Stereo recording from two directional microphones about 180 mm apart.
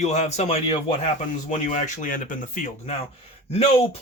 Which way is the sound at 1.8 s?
50° left (ahead or behind).